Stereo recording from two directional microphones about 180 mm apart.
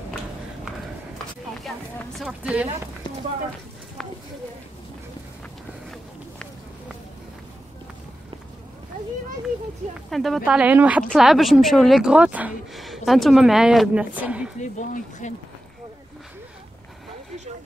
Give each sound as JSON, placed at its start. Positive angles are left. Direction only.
{"t": 1.1, "sound": "speech", "side_deg": 0}
{"t": 4.0, "sound": "a sound", "side_deg": 0}
{"t": 10.0, "sound": "speech", "side_deg": 0}
{"t": 14.6, "sound": "speech", "side_deg": 40}